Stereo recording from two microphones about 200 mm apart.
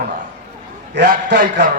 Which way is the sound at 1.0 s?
60° right (ahead or behind).